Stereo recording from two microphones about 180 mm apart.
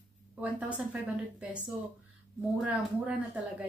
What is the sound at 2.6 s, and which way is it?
Speech, 10° right (ahead or behind).